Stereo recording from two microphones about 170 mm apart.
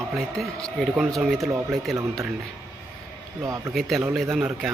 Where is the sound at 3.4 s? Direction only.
20° right (ahead or behind).